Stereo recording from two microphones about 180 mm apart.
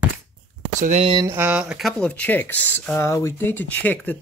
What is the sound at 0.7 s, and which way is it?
Speech, 45° right (ahead or behind).